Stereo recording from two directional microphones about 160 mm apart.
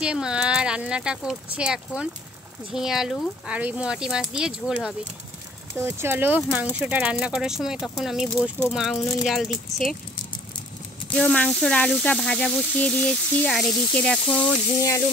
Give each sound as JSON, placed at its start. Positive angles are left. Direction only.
{"t": 0.0, "sound": "speech", "side_deg": -5}
{"t": 11.1, "sound": "speech", "side_deg": 5}
{"t": 14.4, "sound": "speech", "side_deg": 20}